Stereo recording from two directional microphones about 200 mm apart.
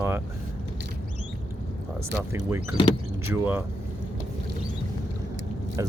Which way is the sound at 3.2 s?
10° right (ahead or behind).